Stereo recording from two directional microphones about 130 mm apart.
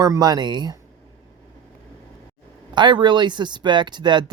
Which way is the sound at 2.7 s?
35° right (ahead or behind).